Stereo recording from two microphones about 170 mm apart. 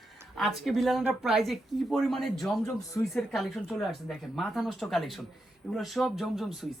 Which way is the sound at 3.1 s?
Centre (ahead or behind).